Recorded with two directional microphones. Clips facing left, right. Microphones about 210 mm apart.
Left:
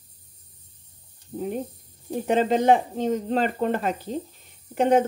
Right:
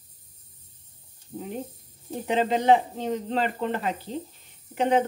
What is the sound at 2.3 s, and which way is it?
Speech, 50° left (ahead or behind).